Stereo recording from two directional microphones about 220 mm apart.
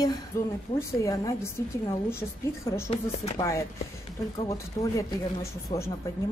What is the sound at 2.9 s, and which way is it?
Speech, 25° left (ahead or behind).